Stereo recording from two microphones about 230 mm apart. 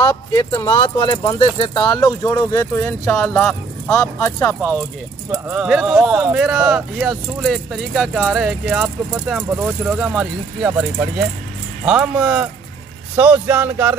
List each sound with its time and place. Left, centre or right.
0.0 s speech: centre
5.3 s speech: centre